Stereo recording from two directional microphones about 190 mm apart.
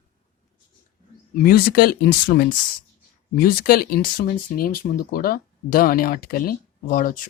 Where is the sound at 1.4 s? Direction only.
50° left (ahead or behind).